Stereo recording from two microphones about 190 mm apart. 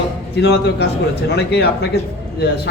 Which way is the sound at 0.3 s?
65° left (ahead or behind).